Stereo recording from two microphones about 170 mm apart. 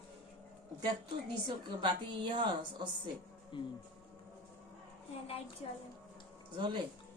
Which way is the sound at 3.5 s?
30° left (ahead or behind).